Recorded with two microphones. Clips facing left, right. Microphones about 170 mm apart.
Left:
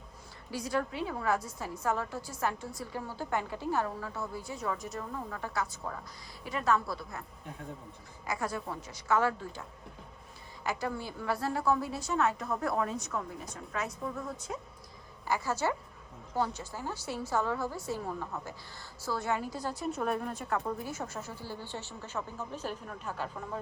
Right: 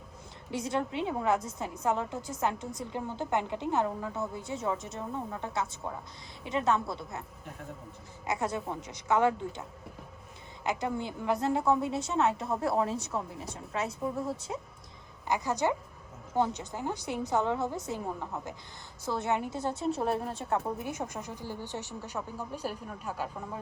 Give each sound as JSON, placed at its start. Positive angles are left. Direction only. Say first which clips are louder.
{"t": 0.5, "sound": "a woman's voice", "louder": "right 2 dB", "side_deg": -20}
{"t": 8.3, "sound": "a woman's voice", "louder": "right 3 dB", "side_deg": -20}
{"t": 15.3, "sound": "a woman's voice", "louder": "right 2 dB", "side_deg": -15}